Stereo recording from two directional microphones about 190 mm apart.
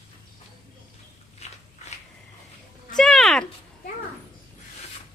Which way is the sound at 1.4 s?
35° left (ahead or behind).